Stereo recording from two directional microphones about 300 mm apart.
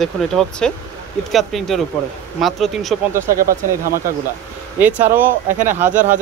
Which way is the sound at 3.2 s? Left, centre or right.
Right.